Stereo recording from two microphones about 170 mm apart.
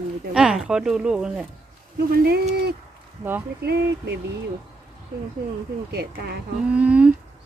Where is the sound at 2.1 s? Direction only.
65° right (ahead or behind).